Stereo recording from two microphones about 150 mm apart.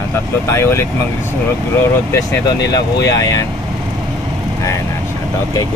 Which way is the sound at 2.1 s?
20° left (ahead or behind).